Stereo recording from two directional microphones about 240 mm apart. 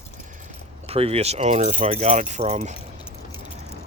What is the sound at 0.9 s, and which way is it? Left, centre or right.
Speech, right.